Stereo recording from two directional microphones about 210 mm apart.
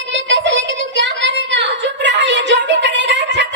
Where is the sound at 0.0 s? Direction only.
60° right (ahead or behind).